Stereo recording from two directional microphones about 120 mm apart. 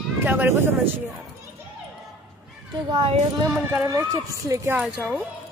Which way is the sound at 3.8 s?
25° right (ahead or behind).